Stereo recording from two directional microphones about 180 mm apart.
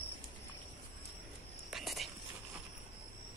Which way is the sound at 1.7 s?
Centre (ahead or behind).